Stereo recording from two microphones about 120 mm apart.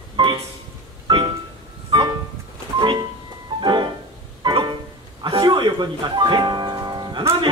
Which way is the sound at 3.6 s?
40° right (ahead or behind).